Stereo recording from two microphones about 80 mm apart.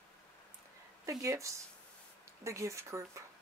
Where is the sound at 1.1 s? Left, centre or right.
Right.